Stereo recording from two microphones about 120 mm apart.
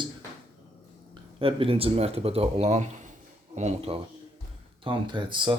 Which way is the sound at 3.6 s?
60° right (ahead or behind).